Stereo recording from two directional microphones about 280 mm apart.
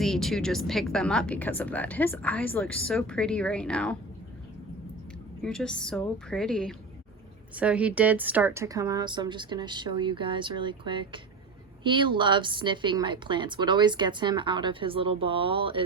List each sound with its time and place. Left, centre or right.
0.0 s speech: centre
5.4 s a woman's voice: centre